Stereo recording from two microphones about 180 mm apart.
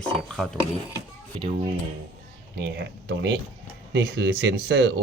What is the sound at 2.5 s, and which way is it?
Speech, 70° right (ahead or behind).